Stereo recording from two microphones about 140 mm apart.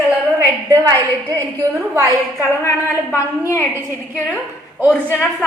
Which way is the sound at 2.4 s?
20° left (ahead or behind).